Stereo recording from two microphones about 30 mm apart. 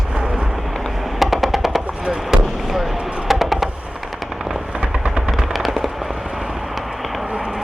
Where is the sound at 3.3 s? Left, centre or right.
Centre.